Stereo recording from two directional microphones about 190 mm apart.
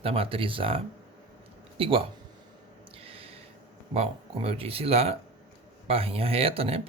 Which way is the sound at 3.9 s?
30° right (ahead or behind).